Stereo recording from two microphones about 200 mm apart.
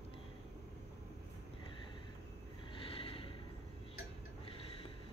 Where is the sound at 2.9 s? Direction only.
25° left (ahead or behind).